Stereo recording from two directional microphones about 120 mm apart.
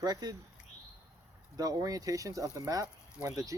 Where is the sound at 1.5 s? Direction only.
30° right (ahead or behind).